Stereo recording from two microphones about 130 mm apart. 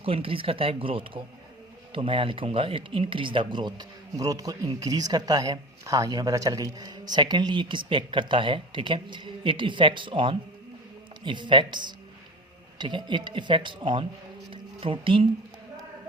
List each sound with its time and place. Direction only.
0.0 s speech: 45° right (ahead or behind)
14.5 s music: 40° right (ahead or behind)